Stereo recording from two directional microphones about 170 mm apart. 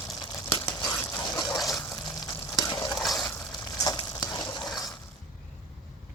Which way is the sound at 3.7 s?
20° left (ahead or behind).